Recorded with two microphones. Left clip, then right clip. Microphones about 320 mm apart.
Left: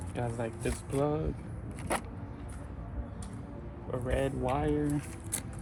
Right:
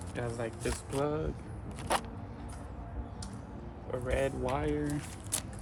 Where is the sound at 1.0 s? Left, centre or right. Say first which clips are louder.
Left 2 dB; centre.